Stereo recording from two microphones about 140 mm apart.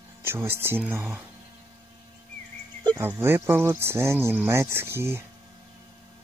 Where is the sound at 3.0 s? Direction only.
15° right (ahead or behind).